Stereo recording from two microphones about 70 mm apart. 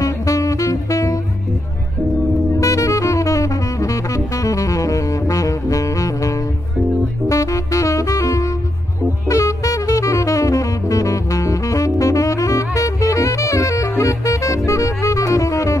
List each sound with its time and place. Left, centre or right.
0.0 s music: left
2.5 s saxophone: left